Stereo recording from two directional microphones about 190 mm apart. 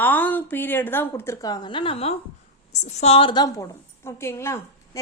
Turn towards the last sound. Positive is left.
turn(degrees=15)  # may be behind; listen again after turning